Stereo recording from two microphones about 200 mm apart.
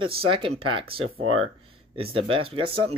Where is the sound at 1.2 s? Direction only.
90° right.